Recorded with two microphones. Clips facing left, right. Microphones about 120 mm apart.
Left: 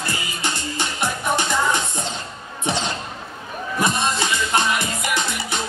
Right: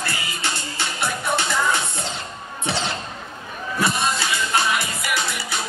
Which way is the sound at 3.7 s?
20° left (ahead or behind).